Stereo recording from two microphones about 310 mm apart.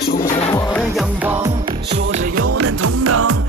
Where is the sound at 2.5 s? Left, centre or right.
Right.